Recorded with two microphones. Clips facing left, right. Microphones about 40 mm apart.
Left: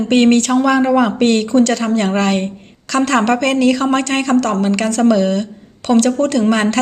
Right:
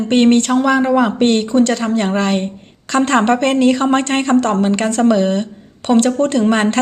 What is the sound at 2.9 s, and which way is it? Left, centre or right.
Speech, right.